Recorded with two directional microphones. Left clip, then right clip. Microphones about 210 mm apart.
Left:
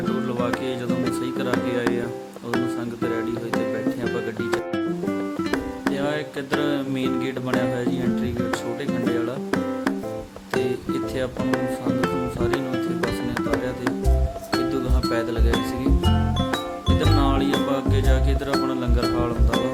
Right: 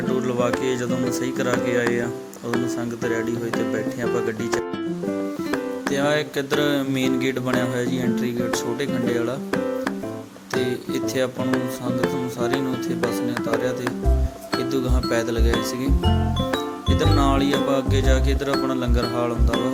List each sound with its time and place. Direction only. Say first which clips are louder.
0.3 s music: right 3 dB; 10° right (ahead or behind)
2.5 s speech: right 1 dB; 5° right (ahead or behind)
5.9 s music: right 5 dB; 15° right (ahead or behind)
9.1 s music: right 1 dB; centre (ahead or behind)
10.6 s speech: even; 10° right (ahead or behind)
11.5 s speech: left 1 dB; centre (ahead or behind)
14.5 s music: right 1 dB; 5° right (ahead or behind)